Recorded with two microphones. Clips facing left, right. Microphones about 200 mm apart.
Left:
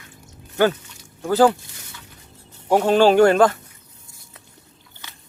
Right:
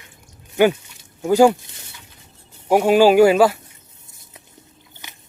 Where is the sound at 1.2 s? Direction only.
15° right (ahead or behind).